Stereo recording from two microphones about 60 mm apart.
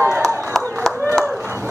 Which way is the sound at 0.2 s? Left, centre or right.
Centre.